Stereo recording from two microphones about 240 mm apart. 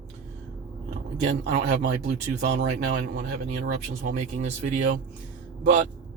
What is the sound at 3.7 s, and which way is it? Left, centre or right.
Speech, right.